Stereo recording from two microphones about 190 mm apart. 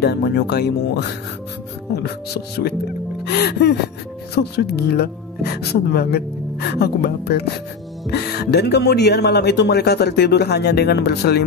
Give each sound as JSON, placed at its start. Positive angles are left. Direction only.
{"t": 0.0, "sound": "speech", "side_deg": 60}